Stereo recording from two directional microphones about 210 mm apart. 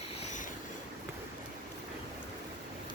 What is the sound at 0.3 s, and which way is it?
Vehicle, 35° left (ahead or behind).